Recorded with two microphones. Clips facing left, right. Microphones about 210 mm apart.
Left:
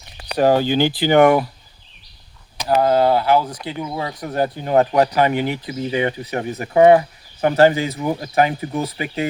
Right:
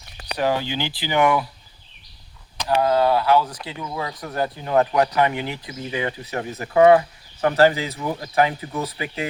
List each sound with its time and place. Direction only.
0.3 s speech: 40° left (ahead or behind)
2.6 s speech: 30° left (ahead or behind)